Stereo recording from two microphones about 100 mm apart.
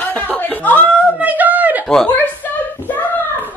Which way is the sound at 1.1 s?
15° right (ahead or behind).